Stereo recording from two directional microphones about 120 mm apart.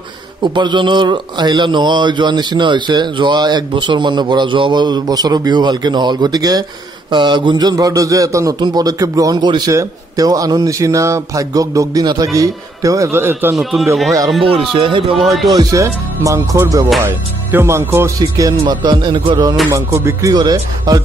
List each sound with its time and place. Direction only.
0.4 s speech: 40° right (ahead or behind); by 13.6 s 20° right (ahead or behind)
13.6 s speech: centre (ahead or behind)
14.8 s speech: 45° right (ahead or behind)
15.1 s speech: centre (ahead or behind)
15.5 s speech: 25° right (ahead or behind)
18.7 s speech: 35° right (ahead or behind)
19.7 s speech: 25° right (ahead or behind)